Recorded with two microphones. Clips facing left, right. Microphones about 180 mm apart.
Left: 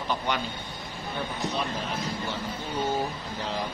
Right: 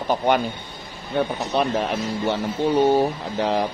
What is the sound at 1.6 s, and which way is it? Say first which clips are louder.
Speech: right 9 dB; 70° right (ahead or behind).